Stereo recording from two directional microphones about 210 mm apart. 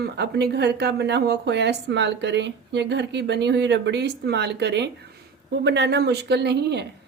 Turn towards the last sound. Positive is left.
turn(degrees=-55)  # may be behind; listen again after turning